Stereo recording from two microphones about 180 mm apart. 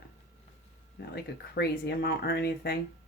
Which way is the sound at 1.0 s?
65° left (ahead or behind).